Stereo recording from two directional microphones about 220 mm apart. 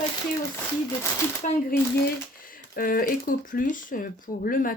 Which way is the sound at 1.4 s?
30° left (ahead or behind).